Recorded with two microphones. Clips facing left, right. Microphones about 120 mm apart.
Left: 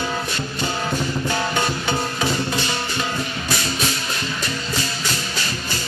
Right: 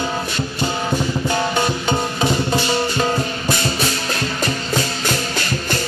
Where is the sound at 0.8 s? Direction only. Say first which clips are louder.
Right 3 dB; 15° right (ahead or behind).